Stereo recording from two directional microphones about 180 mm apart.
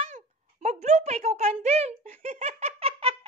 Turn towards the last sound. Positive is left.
turn(degrees=-30)  # may be behind; listen again after turning